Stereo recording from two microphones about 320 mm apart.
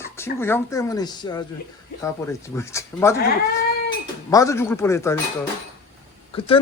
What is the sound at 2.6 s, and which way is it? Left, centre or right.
Speech, centre.